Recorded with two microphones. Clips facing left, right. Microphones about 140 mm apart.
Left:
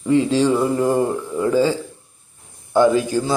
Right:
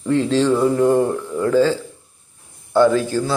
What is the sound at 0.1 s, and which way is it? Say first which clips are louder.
A man's voice: even; 10° left (ahead or behind).